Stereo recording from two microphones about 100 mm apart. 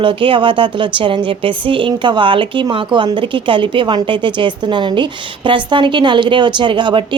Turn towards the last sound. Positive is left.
turn(degrees=-55)  # may be behind; listen again after turning